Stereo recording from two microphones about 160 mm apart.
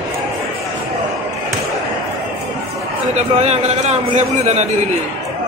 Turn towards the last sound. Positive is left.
turn(degrees=-45)  # may be behind; listen again after turning